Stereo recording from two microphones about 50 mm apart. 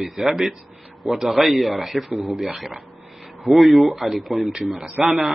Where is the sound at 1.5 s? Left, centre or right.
Centre.